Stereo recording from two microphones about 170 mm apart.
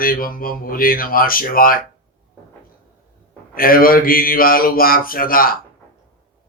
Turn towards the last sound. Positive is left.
turn(degrees=60)  # may be behind; listen again after turning